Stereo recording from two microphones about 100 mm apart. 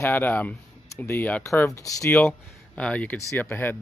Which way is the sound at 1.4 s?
30° left (ahead or behind).